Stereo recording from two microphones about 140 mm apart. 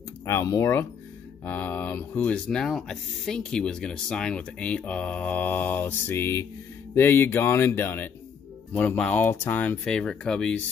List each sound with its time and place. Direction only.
0.2 s speech: 20° left (ahead or behind)